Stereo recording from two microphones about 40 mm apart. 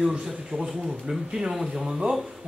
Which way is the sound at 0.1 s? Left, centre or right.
Centre.